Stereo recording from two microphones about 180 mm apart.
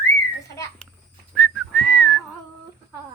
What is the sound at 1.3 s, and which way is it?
Whistling, centre (ahead or behind).